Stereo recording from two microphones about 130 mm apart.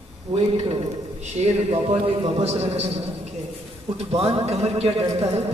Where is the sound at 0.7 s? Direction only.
55° right (ahead or behind).